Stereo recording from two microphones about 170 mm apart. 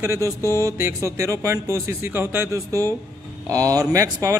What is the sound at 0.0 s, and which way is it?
Mantra, 15° right (ahead or behind).